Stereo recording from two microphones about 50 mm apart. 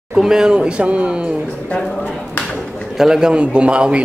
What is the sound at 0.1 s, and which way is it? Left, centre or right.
A man's voice, centre.